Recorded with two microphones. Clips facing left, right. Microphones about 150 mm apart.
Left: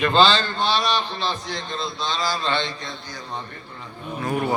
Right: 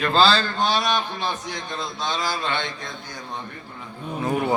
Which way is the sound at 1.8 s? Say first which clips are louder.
Left 1 dB; 50° right (ahead or behind).